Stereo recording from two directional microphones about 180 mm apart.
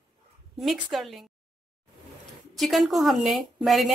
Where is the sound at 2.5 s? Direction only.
Centre (ahead or behind).